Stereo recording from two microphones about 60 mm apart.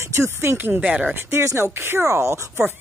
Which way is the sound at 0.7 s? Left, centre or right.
Centre.